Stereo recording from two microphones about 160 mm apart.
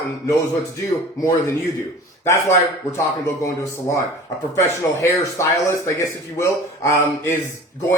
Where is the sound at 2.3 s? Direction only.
20° left (ahead or behind).